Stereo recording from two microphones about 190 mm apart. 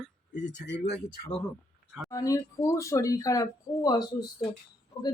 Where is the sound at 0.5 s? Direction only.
65° left (ahead or behind).